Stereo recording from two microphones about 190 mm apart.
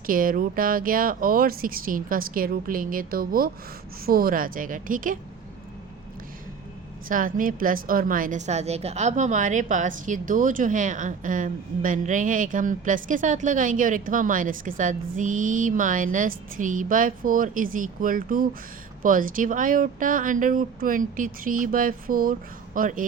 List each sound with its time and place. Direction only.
0.0 s a woman's voice: 45° right (ahead or behind)
7.1 s a woman's voice: 45° right (ahead or behind)